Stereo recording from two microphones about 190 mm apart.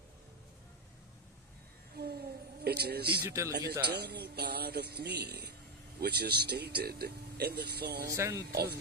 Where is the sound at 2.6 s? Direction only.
60° right (ahead or behind).